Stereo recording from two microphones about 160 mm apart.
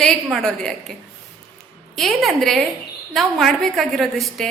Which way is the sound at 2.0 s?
Centre (ahead or behind).